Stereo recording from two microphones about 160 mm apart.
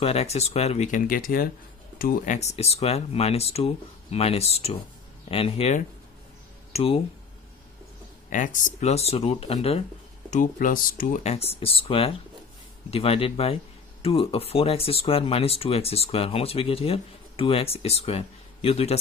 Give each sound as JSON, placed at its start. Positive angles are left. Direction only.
{"t": 0.0, "sound": "speech", "side_deg": 40}
{"t": 1.0, "sound": "speech", "side_deg": 60}
{"t": 8.3, "sound": "speech", "side_deg": 55}
{"t": 10.3, "sound": "speech", "side_deg": 55}